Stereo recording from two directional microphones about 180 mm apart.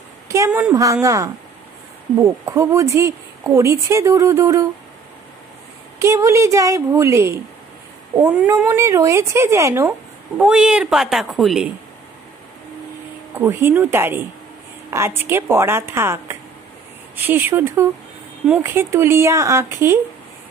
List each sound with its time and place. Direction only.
0.3 s speech: 15° right (ahead or behind)
5.9 s speech: 15° right (ahead or behind)
8.5 s speech: 15° right (ahead or behind)
13.3 s speech: 15° right (ahead or behind)